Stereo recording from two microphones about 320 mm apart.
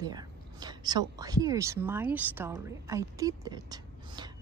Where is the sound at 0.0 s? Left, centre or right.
Centre.